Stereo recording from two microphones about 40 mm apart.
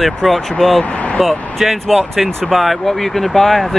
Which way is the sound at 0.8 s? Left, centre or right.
Left.